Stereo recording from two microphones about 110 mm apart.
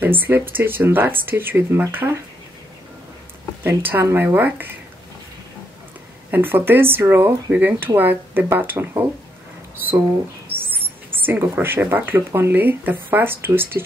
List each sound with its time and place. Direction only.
0.0 s speech: 20° right (ahead or behind)
3.6 s speech: 20° right (ahead or behind)
6.3 s speech: 20° right (ahead or behind)
10.5 s rodents: 20° right (ahead or behind)
11.2 s speech: 20° right (ahead or behind)